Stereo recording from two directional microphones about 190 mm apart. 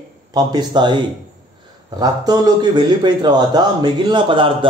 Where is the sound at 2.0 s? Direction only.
20° right (ahead or behind).